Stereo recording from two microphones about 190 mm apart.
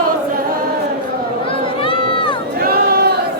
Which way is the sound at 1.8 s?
25° left (ahead or behind).